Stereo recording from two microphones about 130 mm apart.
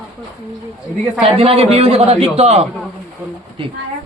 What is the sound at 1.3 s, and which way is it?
Speech, 50° right (ahead or behind).